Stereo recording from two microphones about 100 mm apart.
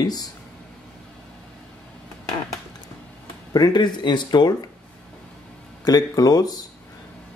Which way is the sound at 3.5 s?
45° left (ahead or behind).